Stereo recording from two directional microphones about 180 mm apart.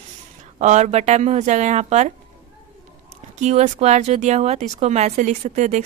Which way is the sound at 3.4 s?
40° right (ahead or behind).